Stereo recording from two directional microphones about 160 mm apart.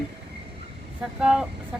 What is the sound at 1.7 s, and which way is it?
Chicken, 5° right (ahead or behind).